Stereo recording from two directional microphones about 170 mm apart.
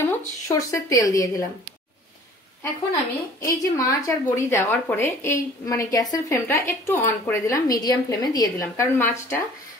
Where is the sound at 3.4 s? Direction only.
20° left (ahead or behind).